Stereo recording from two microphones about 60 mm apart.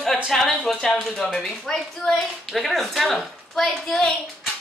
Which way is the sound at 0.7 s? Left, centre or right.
Centre.